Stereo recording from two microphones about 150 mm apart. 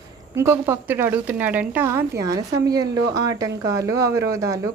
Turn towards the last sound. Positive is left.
turn(degrees=-20)  # may be behind; listen again after turning